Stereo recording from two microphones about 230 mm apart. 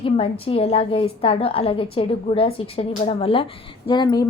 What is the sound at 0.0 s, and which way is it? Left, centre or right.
A woman's voice, left.